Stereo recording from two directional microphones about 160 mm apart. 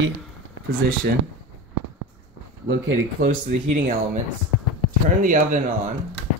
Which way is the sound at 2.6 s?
80° right.